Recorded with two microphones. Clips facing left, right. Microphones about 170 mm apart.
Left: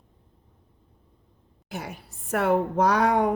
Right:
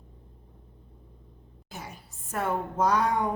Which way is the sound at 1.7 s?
70° left (ahead or behind).